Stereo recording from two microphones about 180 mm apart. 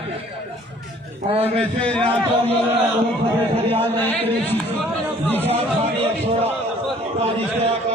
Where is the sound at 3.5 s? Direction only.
35° right (ahead or behind).